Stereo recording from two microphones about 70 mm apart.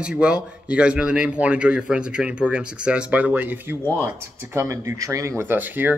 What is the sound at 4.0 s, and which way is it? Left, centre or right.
Speech, right.